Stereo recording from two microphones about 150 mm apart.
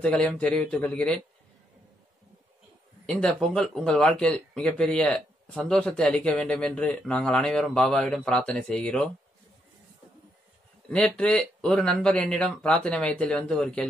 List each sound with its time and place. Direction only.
0.0 s speech: 5° left (ahead or behind)
3.1 s speech: 5° left (ahead or behind)
10.9 s speech: 5° left (ahead or behind)